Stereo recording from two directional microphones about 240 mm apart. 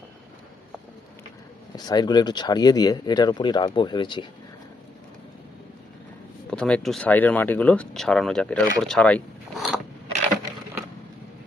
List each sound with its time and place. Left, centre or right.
1.7 s speech: centre
6.5 s speech: centre